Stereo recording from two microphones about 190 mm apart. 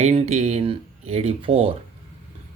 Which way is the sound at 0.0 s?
35° right (ahead or behind).